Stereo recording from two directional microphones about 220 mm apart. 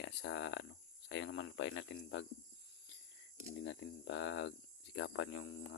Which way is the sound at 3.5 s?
55° left (ahead or behind).